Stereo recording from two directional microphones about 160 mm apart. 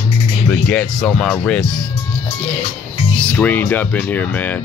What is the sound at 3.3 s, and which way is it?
Speech, 10° left (ahead or behind).